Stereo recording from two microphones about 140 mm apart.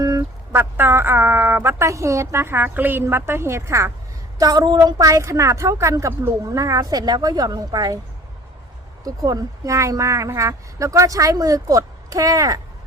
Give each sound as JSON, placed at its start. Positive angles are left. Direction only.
{"t": 0.0, "sound": "a woman's voice", "side_deg": -20}
{"t": 9.0, "sound": "a woman's voice", "side_deg": -25}